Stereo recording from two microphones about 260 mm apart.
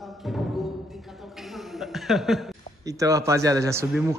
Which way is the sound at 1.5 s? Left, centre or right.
Centre.